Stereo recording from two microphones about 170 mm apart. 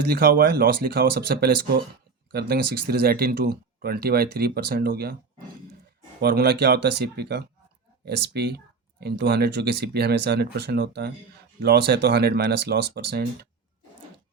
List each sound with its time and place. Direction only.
0.1 s speech: 65° right (ahead or behind)
6.1 s speech: 70° right (ahead or behind)